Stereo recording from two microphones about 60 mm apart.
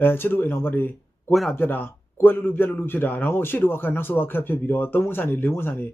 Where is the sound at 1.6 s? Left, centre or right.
Left.